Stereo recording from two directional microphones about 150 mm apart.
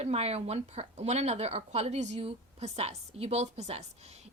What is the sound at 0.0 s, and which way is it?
A woman's voice, 45° right (ahead or behind).